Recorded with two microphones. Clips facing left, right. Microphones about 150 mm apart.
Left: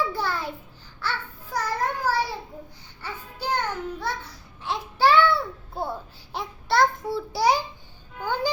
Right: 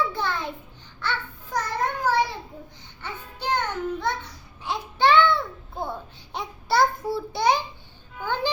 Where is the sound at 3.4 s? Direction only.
5° left (ahead or behind).